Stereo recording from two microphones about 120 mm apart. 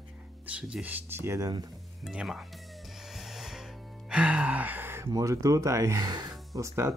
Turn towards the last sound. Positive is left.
turn(degrees=-25)  # may be behind; listen again after turning